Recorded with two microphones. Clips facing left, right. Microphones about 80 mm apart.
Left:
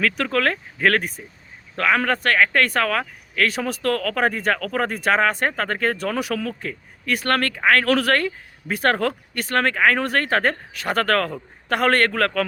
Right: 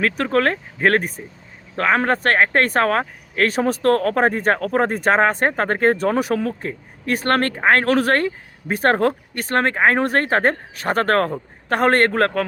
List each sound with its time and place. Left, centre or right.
0.0 s speech: right